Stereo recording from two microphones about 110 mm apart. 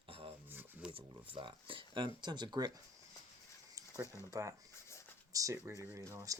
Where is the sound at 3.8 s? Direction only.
30° right (ahead or behind).